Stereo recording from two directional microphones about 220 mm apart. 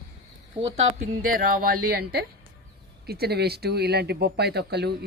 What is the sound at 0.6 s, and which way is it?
Speech, 35° right (ahead or behind).